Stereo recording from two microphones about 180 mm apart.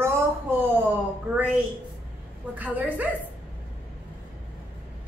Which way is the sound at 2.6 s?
10° right (ahead or behind).